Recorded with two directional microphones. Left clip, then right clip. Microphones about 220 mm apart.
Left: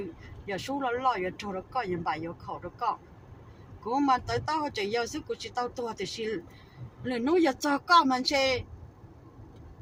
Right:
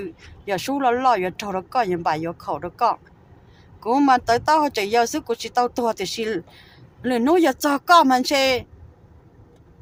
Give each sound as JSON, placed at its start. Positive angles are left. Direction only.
{"t": 0.4, "sound": "speech", "side_deg": -40}